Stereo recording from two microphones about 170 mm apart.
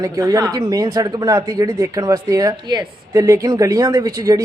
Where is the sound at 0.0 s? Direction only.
20° right (ahead or behind).